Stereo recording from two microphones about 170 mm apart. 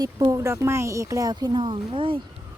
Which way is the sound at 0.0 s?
20° right (ahead or behind).